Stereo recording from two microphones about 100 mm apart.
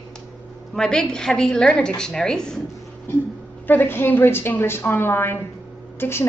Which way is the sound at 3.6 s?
20° left (ahead or behind).